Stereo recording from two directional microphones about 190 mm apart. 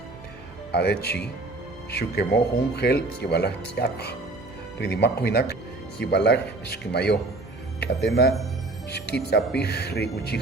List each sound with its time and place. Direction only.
0.7 s speech: 60° left (ahead or behind)